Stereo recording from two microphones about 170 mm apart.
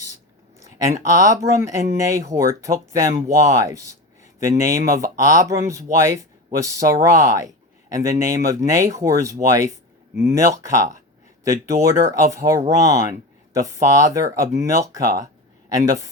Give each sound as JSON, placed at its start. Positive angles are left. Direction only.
{"t": 0.9, "sound": "speech", "side_deg": -20}